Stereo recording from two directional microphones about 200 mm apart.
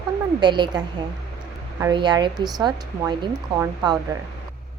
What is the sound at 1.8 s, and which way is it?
Speech, 20° right (ahead or behind).